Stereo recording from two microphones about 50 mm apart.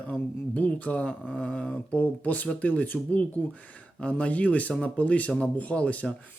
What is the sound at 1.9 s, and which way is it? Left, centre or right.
Speech, left.